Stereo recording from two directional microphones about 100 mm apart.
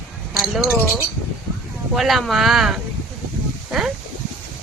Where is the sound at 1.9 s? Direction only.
Centre (ahead or behind).